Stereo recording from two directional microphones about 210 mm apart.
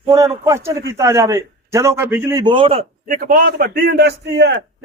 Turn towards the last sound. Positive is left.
turn(degrees=-55)  # may be behind; listen again after turning